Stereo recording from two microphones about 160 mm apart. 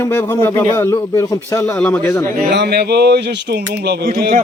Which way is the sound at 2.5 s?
90° right.